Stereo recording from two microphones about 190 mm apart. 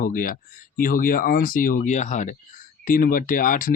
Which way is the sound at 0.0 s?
45° left (ahead or behind).